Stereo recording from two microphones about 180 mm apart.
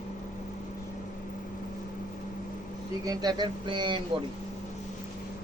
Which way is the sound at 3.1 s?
20° right (ahead or behind).